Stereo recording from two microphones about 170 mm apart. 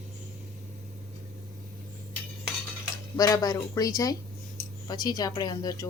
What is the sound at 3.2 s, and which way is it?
Speech, 20° left (ahead or behind).